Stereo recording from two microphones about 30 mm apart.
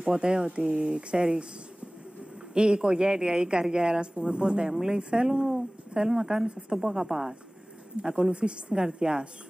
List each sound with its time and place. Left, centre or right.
0.1 s speech: right
2.5 s a woman's voice: right; by 7.3 s centre
8.0 s speech: right